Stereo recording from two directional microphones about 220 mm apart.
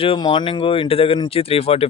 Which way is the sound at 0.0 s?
25° left (ahead or behind).